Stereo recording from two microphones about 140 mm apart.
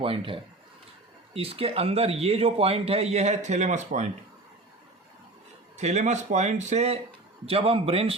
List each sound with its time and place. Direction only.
0.0 s a man's voice: 40° right (ahead or behind); by 4.1 s 60° right (ahead or behind)
5.7 s a man's voice: 55° right (ahead or behind)